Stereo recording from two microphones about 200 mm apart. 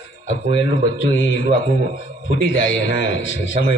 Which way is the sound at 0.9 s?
65° left (ahead or behind).